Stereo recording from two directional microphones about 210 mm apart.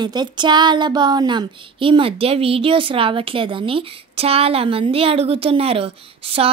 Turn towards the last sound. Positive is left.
turn(degrees=-25)  # may be behind; listen again after turning